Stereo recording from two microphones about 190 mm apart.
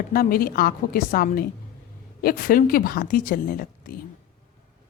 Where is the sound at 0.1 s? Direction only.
50° left (ahead or behind).